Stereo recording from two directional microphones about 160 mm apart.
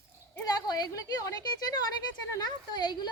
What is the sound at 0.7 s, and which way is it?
Speech, 25° left (ahead or behind).